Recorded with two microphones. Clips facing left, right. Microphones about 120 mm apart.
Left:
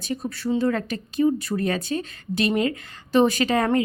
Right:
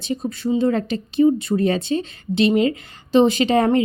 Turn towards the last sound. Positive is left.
turn(degrees=-30)  # may be behind; listen again after turning